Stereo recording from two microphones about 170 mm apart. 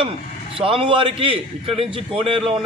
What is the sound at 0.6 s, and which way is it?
A man's voice, 30° right (ahead or behind).